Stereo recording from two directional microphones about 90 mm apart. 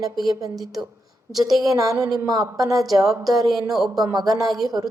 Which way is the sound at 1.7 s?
40° right (ahead or behind).